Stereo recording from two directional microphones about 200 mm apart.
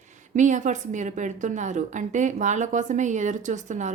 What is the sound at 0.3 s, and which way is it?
A woman's voice, 40° right (ahead or behind).